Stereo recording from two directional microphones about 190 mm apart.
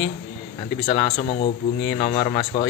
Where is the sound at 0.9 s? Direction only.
30° left (ahead or behind).